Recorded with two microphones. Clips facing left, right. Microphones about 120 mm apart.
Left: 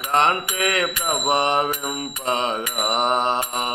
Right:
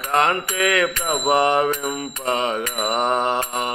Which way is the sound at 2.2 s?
30° left (ahead or behind).